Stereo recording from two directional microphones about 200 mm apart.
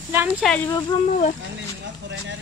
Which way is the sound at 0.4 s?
5° left (ahead or behind).